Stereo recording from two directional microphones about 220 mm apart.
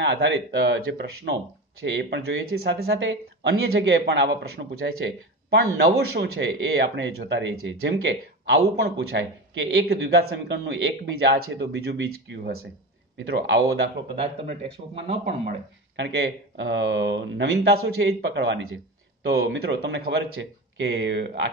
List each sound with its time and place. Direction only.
0.0 s speech: 55° right (ahead or behind)
11.5 s speech: 50° right (ahead or behind)
13.2 s speech: 55° right (ahead or behind)
15.0 s speech: 25° right (ahead or behind)
16.0 s speech: 55° right (ahead or behind)